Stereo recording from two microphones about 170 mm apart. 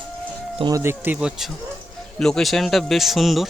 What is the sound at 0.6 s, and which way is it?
Speech, 20° right (ahead or behind).